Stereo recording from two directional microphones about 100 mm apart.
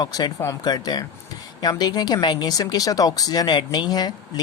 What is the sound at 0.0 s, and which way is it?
Speech, 40° left (ahead or behind).